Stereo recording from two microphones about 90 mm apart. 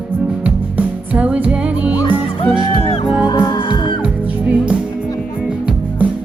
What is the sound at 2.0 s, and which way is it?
Music, 65° left (ahead or behind).